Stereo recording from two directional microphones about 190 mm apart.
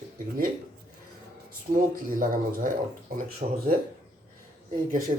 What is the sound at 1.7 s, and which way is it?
Speech, 45° right (ahead or behind).